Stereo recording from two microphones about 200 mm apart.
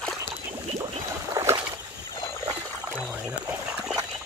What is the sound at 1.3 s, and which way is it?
Boat, 15° right (ahead or behind).